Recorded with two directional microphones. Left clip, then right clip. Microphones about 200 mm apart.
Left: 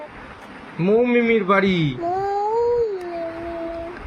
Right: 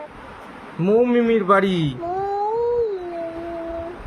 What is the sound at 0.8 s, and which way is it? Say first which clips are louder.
Speech: even; 40° right (ahead or behind).